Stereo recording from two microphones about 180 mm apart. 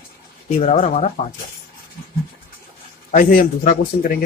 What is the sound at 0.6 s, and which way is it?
Speech, 40° left (ahead or behind).